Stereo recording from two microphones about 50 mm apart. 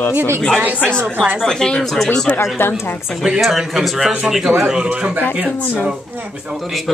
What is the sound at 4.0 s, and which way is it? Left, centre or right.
Speech, right.